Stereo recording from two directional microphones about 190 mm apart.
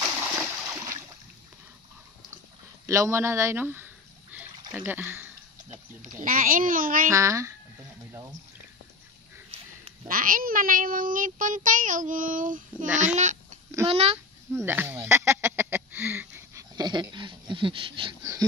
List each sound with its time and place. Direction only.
0.3 s splash: 10° right (ahead or behind)
2.9 s a sound: 15° right (ahead or behind)
6.2 s speech: 45° right (ahead or behind)
7.1 s speech: 15° right (ahead or behind)
8.1 s a sound: 20° right (ahead or behind)
10.0 s speech: 45° right (ahead or behind)
12.7 s a child's voice: 5° right (ahead or behind)
13.0 s babbling: 40° right (ahead or behind)
13.8 s speech: 35° right (ahead or behind)
14.5 s a sound: 10° right (ahead or behind)